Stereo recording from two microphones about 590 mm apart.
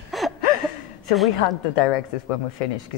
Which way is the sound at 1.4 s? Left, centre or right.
Left.